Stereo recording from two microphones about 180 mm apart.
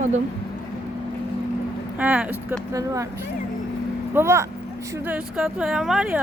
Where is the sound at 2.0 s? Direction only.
10° right (ahead or behind).